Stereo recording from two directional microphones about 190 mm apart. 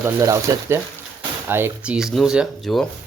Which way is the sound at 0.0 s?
15° right (ahead or behind).